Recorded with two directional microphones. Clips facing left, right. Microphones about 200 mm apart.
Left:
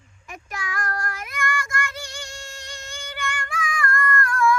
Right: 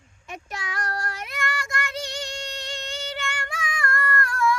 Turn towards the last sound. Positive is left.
turn(degrees=-25)  # may be behind; listen again after turning